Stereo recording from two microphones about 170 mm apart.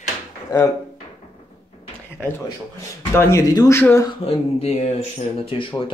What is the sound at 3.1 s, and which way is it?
Speech, 15° left (ahead or behind).